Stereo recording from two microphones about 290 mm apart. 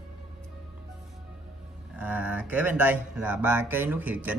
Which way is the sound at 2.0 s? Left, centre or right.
Centre.